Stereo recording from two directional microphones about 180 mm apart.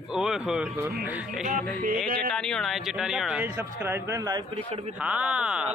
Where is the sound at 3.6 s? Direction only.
15° right (ahead or behind).